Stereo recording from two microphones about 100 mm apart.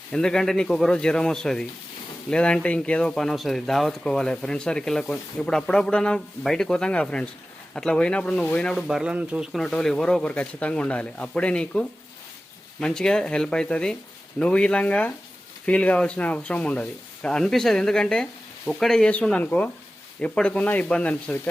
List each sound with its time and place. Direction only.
0.1 s speech: 5° left (ahead or behind)
8.9 s speech: 5° right (ahead or behind)
9.5 s speech: 5° left (ahead or behind)